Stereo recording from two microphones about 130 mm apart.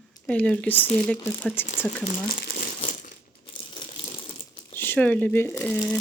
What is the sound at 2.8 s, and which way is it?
Crumpling, 45° left (ahead or behind).